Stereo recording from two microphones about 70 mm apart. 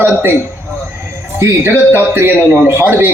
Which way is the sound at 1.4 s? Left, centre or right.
Right.